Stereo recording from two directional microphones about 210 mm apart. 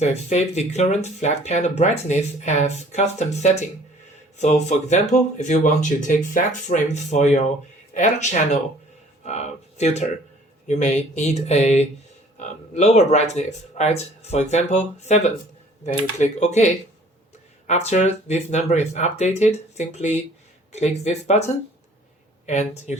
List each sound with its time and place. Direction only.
0.0 s speech: 30° left (ahead or behind)